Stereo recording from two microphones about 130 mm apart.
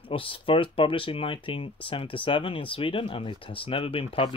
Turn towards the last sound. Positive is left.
turn(degrees=45)  # may be behind; listen again after turning